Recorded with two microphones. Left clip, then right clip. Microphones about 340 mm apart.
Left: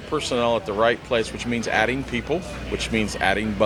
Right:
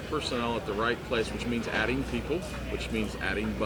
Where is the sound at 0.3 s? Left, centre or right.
Left.